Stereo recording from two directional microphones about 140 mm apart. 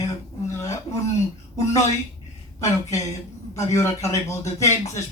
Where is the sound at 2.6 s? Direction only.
25° left (ahead or behind).